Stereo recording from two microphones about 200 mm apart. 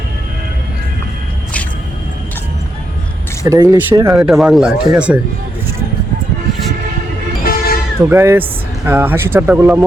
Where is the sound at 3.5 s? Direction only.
15° right (ahead or behind).